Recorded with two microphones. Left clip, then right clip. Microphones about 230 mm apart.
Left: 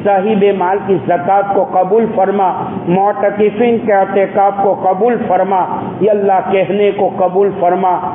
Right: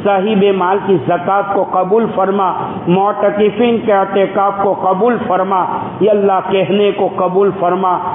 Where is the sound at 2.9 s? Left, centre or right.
Right.